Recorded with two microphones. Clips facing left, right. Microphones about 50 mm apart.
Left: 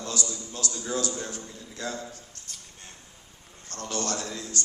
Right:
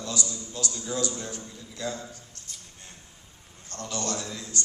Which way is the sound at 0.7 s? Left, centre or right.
Left.